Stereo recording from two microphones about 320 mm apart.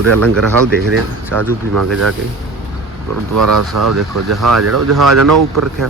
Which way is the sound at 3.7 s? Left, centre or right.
Right.